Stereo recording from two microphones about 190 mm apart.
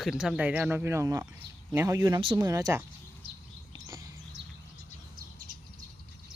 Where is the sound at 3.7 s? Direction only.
20° right (ahead or behind).